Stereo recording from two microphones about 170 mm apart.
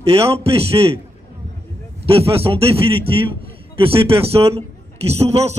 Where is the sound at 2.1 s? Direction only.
35° right (ahead or behind).